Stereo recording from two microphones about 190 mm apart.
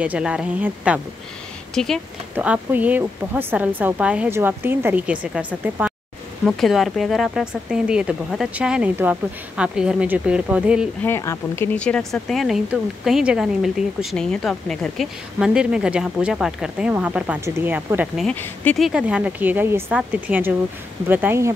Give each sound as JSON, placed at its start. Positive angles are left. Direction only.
{"t": 0.0, "sound": "speech", "side_deg": -5}
{"t": 2.3, "sound": "speech", "side_deg": -10}
{"t": 11.1, "sound": "speech", "side_deg": 15}
{"t": 18.2, "sound": "speech", "side_deg": 10}